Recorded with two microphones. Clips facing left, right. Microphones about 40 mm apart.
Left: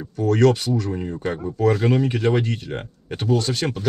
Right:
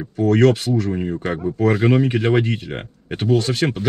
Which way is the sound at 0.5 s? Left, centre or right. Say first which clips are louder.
Right 2 dB; centre.